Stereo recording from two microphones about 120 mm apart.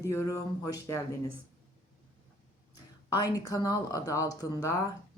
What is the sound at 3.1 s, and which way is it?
A woman's voice, 30° left (ahead or behind).